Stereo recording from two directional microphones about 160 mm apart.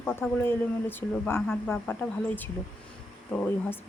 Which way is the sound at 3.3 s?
10° left (ahead or behind).